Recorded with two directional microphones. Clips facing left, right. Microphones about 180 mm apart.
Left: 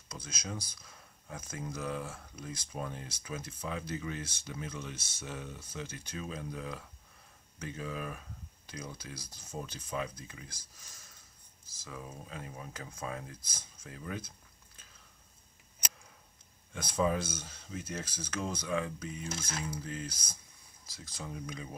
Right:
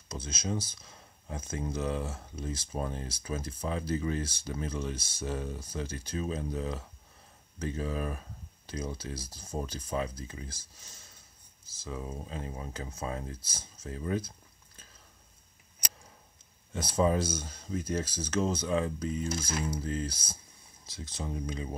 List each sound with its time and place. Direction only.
0.1 s speech: 25° right (ahead or behind)
11.9 s speech: 25° right (ahead or behind)
16.7 s speech: 30° right (ahead or behind)